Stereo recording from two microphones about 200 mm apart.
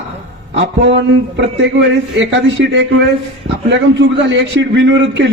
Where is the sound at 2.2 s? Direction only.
65° right (ahead or behind).